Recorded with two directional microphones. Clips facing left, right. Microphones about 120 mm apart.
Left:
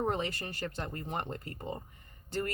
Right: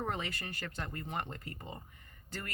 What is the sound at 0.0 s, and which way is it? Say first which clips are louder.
Speech: left 5 dB; 30° left (ahead or behind).